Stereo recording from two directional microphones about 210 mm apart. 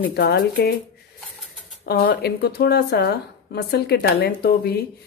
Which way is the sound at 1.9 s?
45° left (ahead or behind).